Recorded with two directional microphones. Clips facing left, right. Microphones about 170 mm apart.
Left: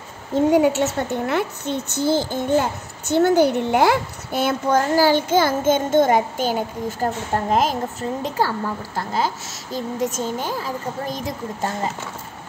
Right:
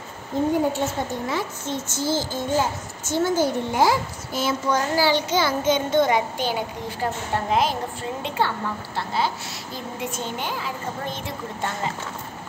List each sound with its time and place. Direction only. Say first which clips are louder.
0.5 s a child's voice: left 6 dB; 75° left (ahead or behind); by 11.9 s 40° left (ahead or behind)